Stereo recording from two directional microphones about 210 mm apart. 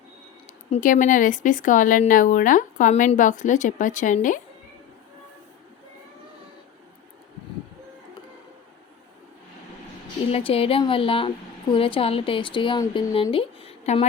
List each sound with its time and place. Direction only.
0.4 s speech: 35° left (ahead or behind)
10.3 s speech: 25° left (ahead or behind)